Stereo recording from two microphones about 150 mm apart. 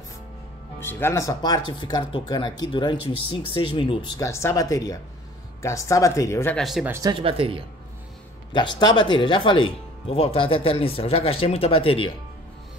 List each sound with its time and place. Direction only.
0.7 s speech: 15° left (ahead or behind); by 4.1 s 35° left (ahead or behind)
4.2 s speech: 20° left (ahead or behind)
6.5 s speech: centre (ahead or behind)
6.9 s speech: 20° right (ahead or behind)
7.2 s speech: 35° right (ahead or behind)
8.5 s speech: 30° left (ahead or behind)